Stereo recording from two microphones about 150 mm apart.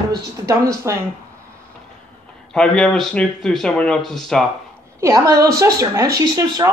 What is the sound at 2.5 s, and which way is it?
Speech, 5° left (ahead or behind).